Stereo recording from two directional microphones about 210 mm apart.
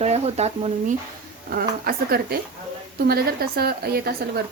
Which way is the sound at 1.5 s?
45° right (ahead or behind).